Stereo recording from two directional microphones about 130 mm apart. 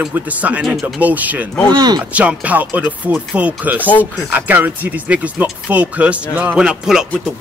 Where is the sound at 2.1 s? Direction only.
10° right (ahead or behind).